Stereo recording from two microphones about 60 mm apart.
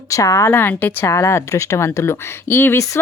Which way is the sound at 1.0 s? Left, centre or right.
Left.